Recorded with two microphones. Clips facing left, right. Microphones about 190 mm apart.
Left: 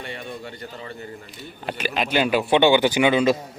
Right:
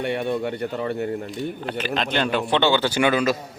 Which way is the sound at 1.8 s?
10° left (ahead or behind).